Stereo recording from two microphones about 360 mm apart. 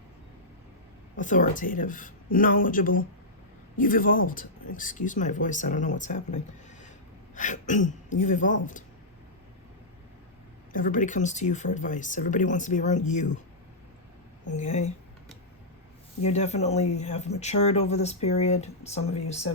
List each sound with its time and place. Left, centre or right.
1.1 s speech: left
10.7 s speech: left
14.5 s speech: centre
16.2 s speech: centre